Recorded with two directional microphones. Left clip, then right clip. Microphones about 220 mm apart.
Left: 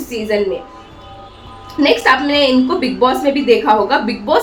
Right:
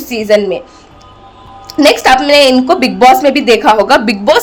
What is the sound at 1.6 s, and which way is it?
A woman's voice, 50° right (ahead or behind).